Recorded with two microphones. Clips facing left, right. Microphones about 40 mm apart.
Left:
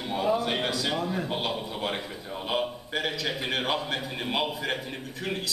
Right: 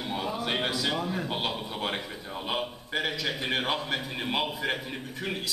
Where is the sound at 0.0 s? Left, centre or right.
Centre.